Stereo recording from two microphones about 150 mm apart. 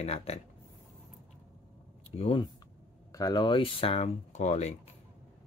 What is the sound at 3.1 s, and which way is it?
Speech, 25° left (ahead or behind).